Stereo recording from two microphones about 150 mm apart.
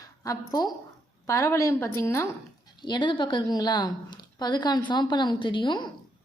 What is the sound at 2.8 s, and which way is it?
A woman's voice, 30° left (ahead or behind).